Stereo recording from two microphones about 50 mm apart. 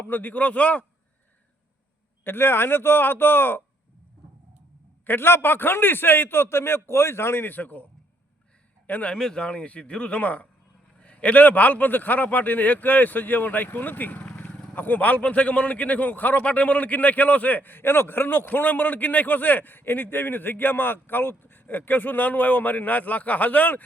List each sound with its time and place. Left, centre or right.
0.0 s a man's voice: left
2.2 s a man's voice: left
5.0 s a man's voice: left
8.9 s a man's voice: left
9.1 s speech: centre
9.4 s a man's voice: left